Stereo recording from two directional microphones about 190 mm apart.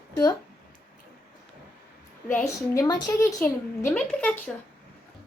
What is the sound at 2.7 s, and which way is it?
Speech, 15° left (ahead or behind).